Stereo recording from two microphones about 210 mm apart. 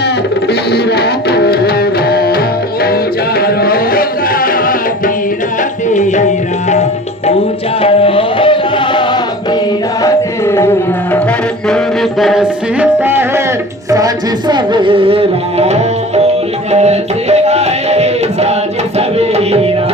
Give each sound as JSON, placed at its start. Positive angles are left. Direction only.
{"t": 0.7, "sound": "music", "side_deg": 50}
{"t": 7.8, "sound": "music", "side_deg": 25}
{"t": 12.2, "sound": "music", "side_deg": -5}
{"t": 13.9, "sound": "speech", "side_deg": -20}
{"t": 16.7, "sound": "music", "side_deg": -30}